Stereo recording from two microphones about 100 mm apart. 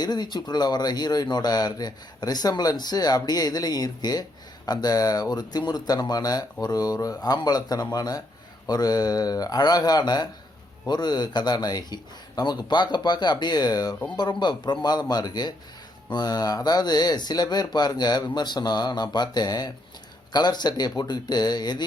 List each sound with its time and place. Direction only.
0.0 s speech: 45° left (ahead or behind)